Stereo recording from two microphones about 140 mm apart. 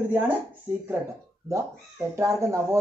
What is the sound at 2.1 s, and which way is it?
Speech, 20° right (ahead or behind).